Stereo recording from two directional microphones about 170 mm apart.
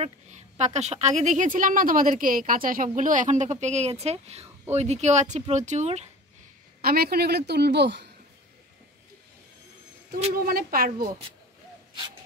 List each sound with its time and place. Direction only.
0.0 s a woman's voice: 40° right (ahead or behind)
6.8 s a woman's voice: 65° right (ahead or behind); by 8.1 s 85° right
10.3 s a woman's voice: 60° right (ahead or behind)